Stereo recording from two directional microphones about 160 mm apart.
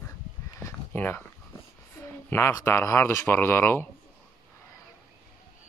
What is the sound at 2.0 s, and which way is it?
Speech, 15° left (ahead or behind).